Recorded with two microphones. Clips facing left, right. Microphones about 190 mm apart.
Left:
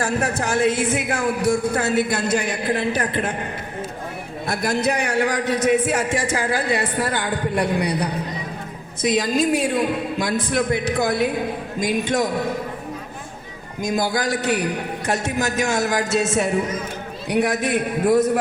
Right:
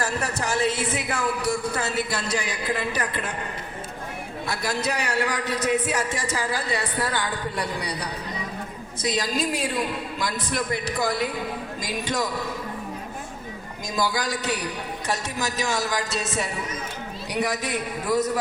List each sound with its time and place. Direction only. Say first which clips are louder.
0.0 s a man's voice: left 5 dB; 50° left (ahead or behind)
4.4 s a man's voice: left 6 dB; 50° left (ahead or behind)
13.8 s a man's voice: left 5 dB; 55° left (ahead or behind)